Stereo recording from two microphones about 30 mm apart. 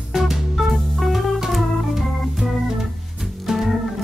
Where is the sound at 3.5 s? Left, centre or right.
Centre.